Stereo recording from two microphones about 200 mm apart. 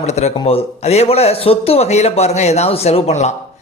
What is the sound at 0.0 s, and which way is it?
Speech, 35° left (ahead or behind).